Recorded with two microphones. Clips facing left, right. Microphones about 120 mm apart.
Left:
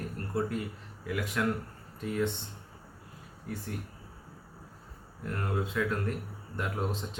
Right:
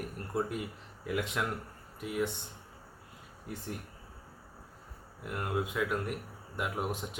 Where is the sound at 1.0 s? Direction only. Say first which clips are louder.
Even; 20° right (ahead or behind).